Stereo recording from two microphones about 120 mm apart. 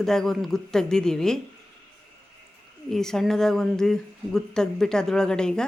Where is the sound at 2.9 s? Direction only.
5° left (ahead or behind).